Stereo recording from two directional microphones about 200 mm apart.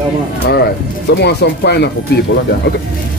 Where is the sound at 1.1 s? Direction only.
55° left (ahead or behind).